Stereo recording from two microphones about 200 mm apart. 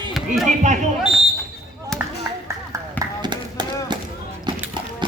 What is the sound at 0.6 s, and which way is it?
Speech, 35° right (ahead or behind).